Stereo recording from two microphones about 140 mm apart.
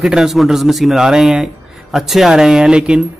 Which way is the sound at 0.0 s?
Centre (ahead or behind).